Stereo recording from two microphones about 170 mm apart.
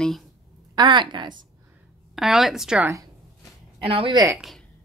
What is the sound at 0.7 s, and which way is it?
Speech, 25° right (ahead or behind).